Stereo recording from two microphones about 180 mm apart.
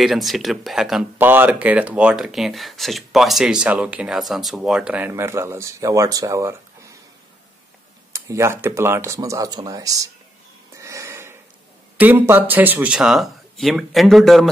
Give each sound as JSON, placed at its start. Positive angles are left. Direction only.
{"t": 0.0, "sound": "speech", "side_deg": 0}
{"t": 8.1, "sound": "speech", "side_deg": -15}
{"t": 10.8, "sound": "a sound", "side_deg": -15}
{"t": 12.0, "sound": "speech", "side_deg": -10}